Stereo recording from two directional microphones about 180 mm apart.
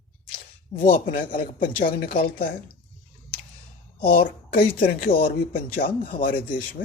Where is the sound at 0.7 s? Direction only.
50° left (ahead or behind).